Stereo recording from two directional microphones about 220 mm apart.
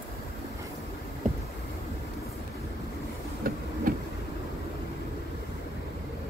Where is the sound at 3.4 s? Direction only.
40° right (ahead or behind).